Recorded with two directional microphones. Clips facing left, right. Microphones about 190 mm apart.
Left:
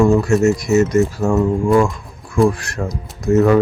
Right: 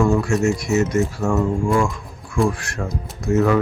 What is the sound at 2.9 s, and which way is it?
Speech, 35° left (ahead or behind).